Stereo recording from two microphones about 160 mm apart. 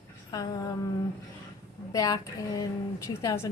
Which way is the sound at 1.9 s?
25° left (ahead or behind).